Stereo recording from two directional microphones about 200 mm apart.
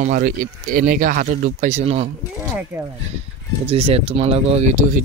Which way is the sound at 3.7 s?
30° right (ahead or behind).